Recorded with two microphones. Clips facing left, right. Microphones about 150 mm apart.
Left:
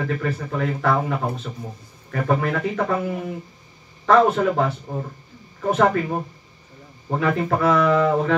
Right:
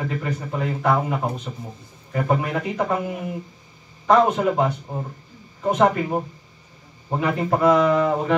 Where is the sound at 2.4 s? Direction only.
20° right (ahead or behind).